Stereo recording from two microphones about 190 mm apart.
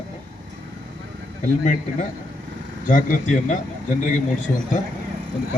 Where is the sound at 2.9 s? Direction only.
45° left (ahead or behind).